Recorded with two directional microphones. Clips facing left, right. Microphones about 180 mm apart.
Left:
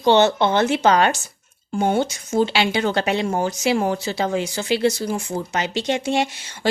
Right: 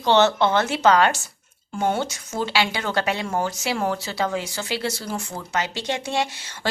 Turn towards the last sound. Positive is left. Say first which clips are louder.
# left 3 dB
turn(degrees=15)  # may be behind; listen again after turning